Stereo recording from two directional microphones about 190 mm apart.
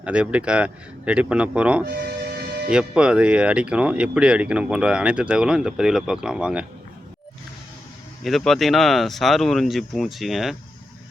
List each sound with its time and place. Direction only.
0.0 s speech: 5° right (ahead or behind)
1.9 s music: 55° right (ahead or behind)
2.6 s speech: 5° right (ahead or behind)
8.2 s speech: centre (ahead or behind)